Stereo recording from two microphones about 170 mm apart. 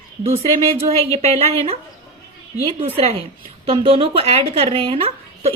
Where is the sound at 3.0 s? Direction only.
35° right (ahead or behind).